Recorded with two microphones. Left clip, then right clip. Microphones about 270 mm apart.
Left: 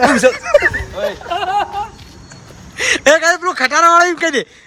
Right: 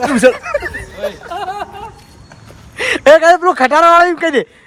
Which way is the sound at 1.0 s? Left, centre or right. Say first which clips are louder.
Left 2 dB; left.